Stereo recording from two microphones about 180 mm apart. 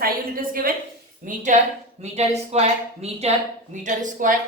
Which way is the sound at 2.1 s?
35° right (ahead or behind).